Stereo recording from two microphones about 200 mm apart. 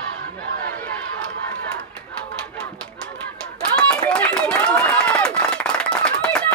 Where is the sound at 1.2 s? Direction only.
5° left (ahead or behind).